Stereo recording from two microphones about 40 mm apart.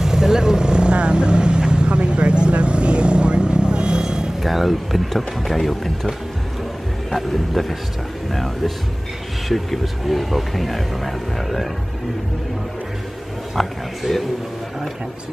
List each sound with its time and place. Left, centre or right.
0.0 s vehicle: centre
4.4 s speech: centre
13.6 s speech: centre